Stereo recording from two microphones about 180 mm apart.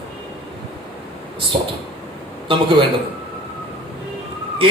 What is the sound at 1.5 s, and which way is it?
Speech, 35° right (ahead or behind).